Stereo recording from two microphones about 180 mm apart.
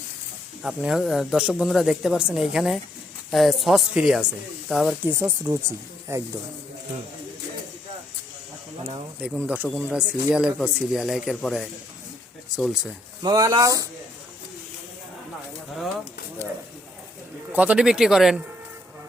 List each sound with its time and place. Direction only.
0.6 s speech: 5° right (ahead or behind)
9.2 s speech: 5° right (ahead or behind)
13.2 s speech: 20° right (ahead or behind)
17.5 s speech: 10° right (ahead or behind)